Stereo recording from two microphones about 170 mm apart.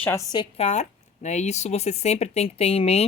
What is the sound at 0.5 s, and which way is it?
Speech, 40° left (ahead or behind).